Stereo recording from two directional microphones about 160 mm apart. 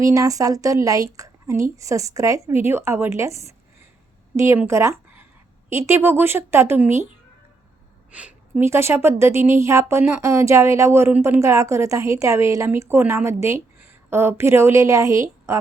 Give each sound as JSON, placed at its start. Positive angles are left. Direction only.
{"t": 0.0, "sound": "a woman's voice", "side_deg": -20}
{"t": 8.1, "sound": "a woman's voice", "side_deg": -10}